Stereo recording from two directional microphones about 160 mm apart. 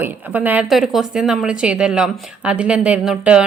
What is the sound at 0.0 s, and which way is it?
A woman's voice, 10° right (ahead or behind).